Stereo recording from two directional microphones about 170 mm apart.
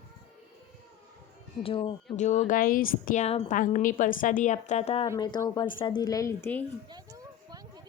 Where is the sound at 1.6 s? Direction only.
30° left (ahead or behind).